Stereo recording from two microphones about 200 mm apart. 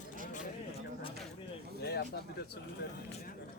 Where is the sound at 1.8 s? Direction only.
55° left (ahead or behind).